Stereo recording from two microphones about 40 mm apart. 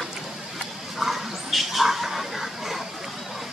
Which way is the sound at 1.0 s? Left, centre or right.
Centre.